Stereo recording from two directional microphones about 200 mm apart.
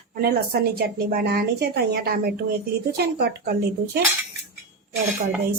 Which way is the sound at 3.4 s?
50° right (ahead or behind).